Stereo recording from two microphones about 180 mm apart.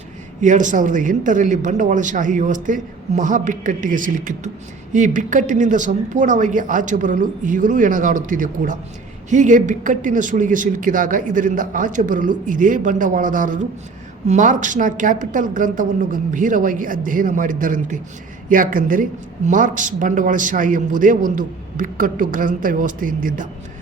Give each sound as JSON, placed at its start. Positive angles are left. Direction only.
{"t": 0.4, "sound": "speech", "side_deg": -45}